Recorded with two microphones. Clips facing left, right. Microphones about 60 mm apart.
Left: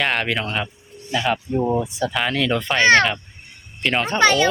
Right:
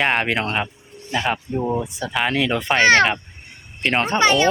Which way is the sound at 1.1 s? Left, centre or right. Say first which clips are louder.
Left 1 dB; centre.